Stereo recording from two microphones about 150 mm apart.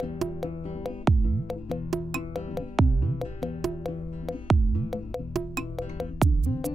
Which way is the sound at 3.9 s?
45° left (ahead or behind).